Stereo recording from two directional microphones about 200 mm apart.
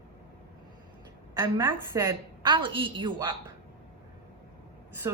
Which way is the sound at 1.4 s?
10° right (ahead or behind).